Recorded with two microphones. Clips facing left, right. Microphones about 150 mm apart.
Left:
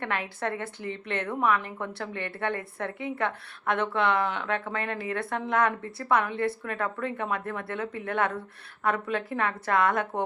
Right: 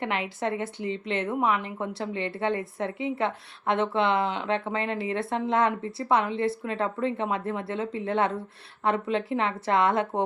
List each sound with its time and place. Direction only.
0.0 s a woman's voice: 20° right (ahead or behind)